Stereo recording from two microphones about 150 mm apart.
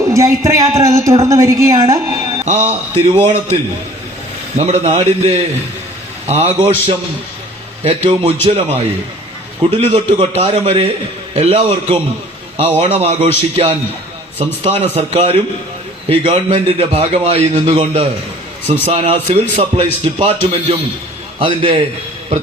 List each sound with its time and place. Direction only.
0.1 s a woman's voice: 20° right (ahead or behind)
2.4 s a man's voice: 50° right (ahead or behind)